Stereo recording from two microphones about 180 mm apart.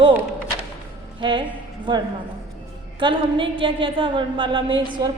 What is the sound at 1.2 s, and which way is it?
Speech, 25° right (ahead or behind).